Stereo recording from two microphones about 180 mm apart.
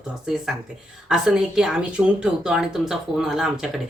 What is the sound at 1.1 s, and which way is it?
Speech, 5° right (ahead or behind).